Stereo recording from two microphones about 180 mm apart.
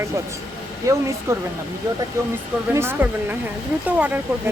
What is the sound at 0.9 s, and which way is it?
Speech, 15° right (ahead or behind).